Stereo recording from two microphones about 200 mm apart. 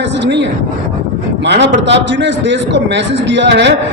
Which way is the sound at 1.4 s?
60° right (ahead or behind).